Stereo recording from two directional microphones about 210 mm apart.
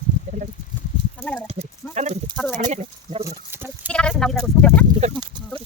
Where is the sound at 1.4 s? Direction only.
30° right (ahead or behind).